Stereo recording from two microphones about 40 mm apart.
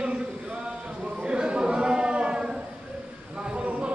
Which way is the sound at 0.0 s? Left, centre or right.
Right.